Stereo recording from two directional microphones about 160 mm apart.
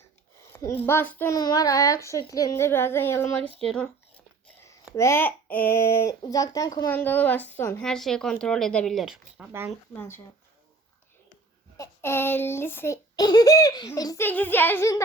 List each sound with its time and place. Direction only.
0.3 s a child's voice: 15° left (ahead or behind)
1.4 s a child's voice: 25° left (ahead or behind)
3.6 s speech: 5° left (ahead or behind)
4.9 s speech: 15° left (ahead or behind)
6.9 s speech: 10° left (ahead or behind)
9.5 s speech: 15° right (ahead or behind)
9.9 s speech: 15° left (ahead or behind)
11.8 s a child's voice: 15° left (ahead or behind)